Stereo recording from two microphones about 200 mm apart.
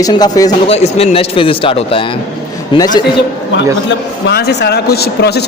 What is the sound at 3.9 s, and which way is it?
A man's voice, 55° left (ahead or behind).